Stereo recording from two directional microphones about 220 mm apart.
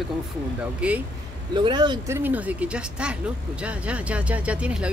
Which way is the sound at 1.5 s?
20° right (ahead or behind).